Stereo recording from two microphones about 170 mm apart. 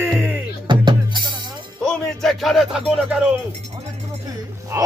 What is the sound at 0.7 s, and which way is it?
Drum, 25° right (ahead or behind).